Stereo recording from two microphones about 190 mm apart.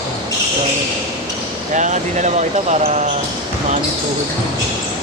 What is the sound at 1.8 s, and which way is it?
Speech, 40° right (ahead or behind).